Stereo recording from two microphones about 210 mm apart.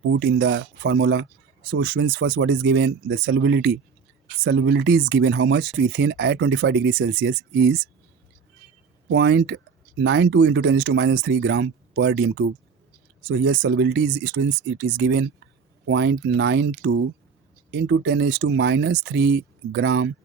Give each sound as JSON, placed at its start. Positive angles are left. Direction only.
{"t": 0.1, "sound": "speech", "side_deg": -55}
{"t": 9.0, "sound": "speech", "side_deg": -60}